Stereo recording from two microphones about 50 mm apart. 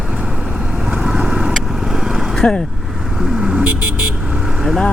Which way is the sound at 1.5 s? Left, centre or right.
Centre.